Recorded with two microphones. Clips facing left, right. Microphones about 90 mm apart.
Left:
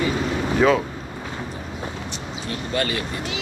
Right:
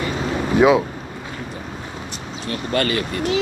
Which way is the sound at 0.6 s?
15° right (ahead or behind).